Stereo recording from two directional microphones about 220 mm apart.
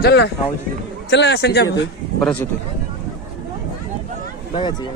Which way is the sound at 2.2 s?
5° left (ahead or behind).